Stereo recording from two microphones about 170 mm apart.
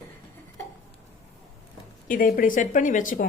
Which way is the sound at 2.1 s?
55° left (ahead or behind).